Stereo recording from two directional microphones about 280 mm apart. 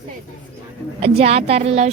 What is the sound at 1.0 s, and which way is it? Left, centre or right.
Speech, right.